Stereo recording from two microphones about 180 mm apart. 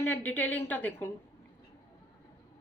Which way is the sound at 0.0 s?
10° left (ahead or behind).